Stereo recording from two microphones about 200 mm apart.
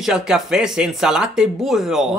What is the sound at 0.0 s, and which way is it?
Speech, 5° right (ahead or behind).